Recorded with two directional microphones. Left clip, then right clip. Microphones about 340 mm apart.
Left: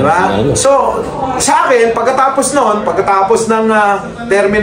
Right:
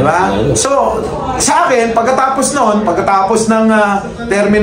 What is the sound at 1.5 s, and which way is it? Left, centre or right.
A man's voice, centre.